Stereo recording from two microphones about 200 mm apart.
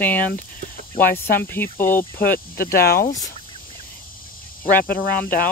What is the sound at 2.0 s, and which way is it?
Speech, 45° left (ahead or behind).